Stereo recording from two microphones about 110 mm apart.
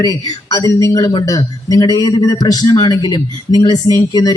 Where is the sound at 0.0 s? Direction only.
30° left (ahead or behind).